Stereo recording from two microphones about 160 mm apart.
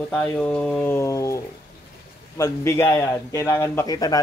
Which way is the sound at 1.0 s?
20° left (ahead or behind).